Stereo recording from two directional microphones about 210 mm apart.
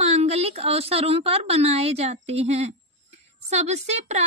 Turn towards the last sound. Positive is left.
turn(degrees=-30)  # may be behind; listen again after turning